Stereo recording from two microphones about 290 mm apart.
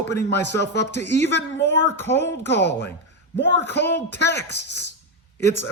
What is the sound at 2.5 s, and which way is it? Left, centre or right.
A woman's voice, left.